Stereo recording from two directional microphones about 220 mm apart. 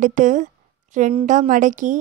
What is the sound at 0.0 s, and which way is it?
A woman's voice, 35° right (ahead or behind).